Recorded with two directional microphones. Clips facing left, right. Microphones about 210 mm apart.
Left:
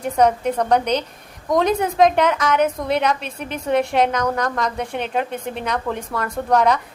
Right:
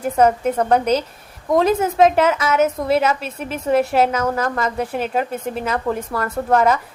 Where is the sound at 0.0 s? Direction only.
5° right (ahead or behind).